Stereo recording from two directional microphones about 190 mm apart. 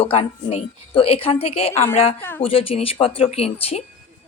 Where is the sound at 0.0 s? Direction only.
30° left (ahead or behind).